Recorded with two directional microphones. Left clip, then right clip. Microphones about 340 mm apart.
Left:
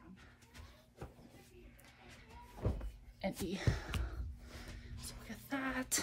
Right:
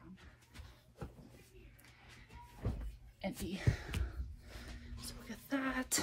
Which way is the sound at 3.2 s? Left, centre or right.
Centre.